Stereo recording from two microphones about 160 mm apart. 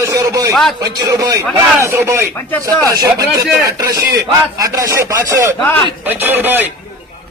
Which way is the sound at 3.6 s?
20° right (ahead or behind).